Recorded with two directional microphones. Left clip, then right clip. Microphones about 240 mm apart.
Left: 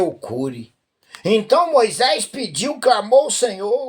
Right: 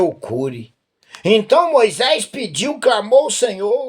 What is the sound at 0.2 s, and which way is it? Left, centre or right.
Speech, right.